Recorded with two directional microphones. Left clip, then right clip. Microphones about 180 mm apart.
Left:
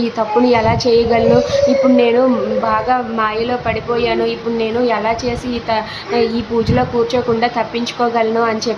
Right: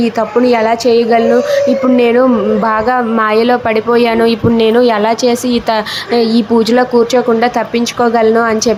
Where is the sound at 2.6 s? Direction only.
40° right (ahead or behind).